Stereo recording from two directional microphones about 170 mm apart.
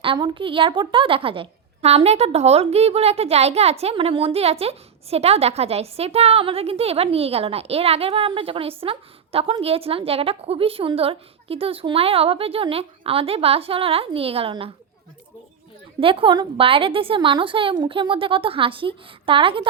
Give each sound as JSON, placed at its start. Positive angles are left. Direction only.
{"t": 0.0, "sound": "a woman's voice", "side_deg": -30}
{"t": 16.0, "sound": "a woman's voice", "side_deg": -30}